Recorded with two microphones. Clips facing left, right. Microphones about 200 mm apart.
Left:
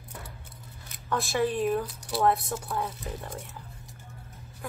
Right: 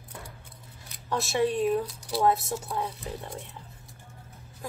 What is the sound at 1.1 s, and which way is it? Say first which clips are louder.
A woman's voice: right 1 dB; 25° right (ahead or behind).